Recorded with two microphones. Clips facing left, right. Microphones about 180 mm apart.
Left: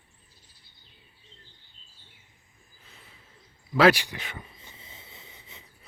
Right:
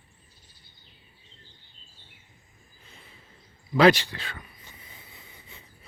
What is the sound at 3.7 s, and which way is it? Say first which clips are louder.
Speech: right 1 dB; 5° left (ahead or behind).